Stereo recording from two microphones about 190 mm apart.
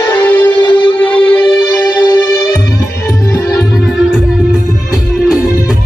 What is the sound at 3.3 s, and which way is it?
Music, 5° left (ahead or behind).